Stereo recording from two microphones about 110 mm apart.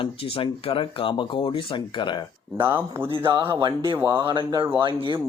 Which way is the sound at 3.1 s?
45° right (ahead or behind).